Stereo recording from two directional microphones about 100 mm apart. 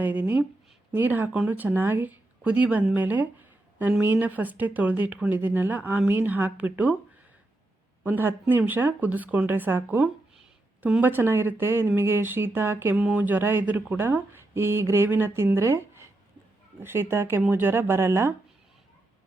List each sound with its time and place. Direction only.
0.0 s speech: 15° right (ahead or behind)
8.0 s speech: 20° right (ahead or behind)